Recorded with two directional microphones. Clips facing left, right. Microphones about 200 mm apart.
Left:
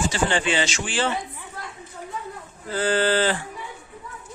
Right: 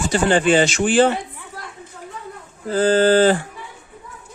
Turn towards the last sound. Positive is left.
turn(degrees=-45)  # may be behind; listen again after turning